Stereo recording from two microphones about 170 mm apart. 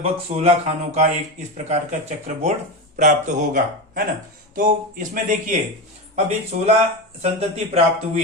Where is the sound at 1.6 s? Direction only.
45° right (ahead or behind).